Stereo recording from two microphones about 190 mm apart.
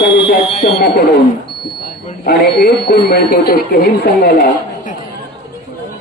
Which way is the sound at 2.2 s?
60° left (ahead or behind).